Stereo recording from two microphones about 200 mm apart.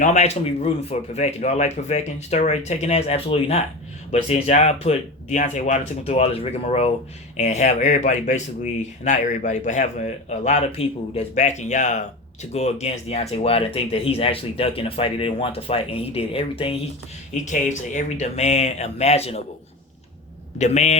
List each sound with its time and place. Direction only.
0.0 s speech: 35° left (ahead or behind)
17.3 s speech: 35° left (ahead or behind)
20.6 s speech: 35° left (ahead or behind)